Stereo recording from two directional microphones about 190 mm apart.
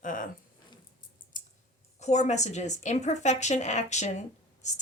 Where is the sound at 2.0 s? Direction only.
35° left (ahead or behind).